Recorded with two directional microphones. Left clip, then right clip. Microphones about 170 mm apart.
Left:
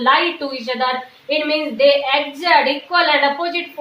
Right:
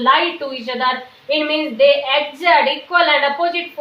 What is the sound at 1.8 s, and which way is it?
A woman's voice, 30° left (ahead or behind).